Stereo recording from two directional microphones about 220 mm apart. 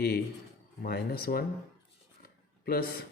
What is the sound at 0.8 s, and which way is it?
Speech, 45° left (ahead or behind).